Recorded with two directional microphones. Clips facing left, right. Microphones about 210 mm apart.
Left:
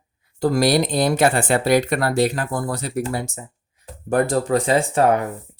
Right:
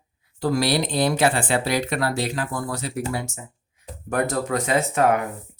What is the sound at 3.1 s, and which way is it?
Speech, 35° left (ahead or behind).